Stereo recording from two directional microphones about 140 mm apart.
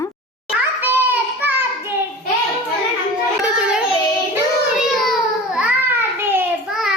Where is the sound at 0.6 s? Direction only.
15° right (ahead or behind).